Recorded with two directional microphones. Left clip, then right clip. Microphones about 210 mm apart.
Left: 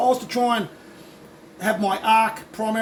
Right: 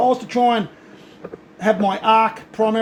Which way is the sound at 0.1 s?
25° right (ahead or behind).